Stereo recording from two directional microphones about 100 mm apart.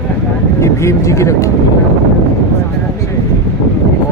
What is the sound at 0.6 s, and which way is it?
Speech, 30° left (ahead or behind).